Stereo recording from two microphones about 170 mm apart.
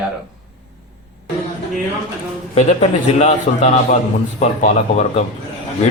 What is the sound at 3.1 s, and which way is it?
Speech, 45° left (ahead or behind).